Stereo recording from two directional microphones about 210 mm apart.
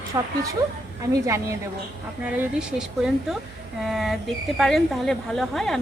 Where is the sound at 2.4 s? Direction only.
5° right (ahead or behind).